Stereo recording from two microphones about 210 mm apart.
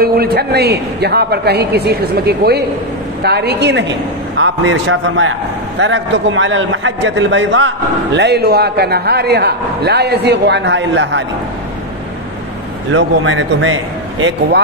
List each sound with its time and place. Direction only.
0.0 s a man's voice: 45° right (ahead or behind)
12.9 s a man's voice: 70° right (ahead or behind)